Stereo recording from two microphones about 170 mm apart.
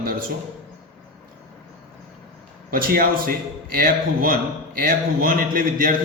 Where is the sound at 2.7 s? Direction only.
60° right (ahead or behind).